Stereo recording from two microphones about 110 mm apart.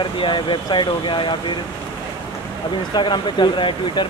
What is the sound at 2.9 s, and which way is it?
Speech, 45° left (ahead or behind).